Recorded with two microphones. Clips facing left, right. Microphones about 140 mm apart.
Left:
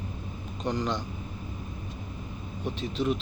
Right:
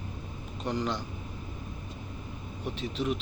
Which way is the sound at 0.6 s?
10° right (ahead or behind).